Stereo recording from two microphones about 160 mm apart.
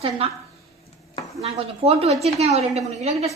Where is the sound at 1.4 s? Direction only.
40° right (ahead or behind).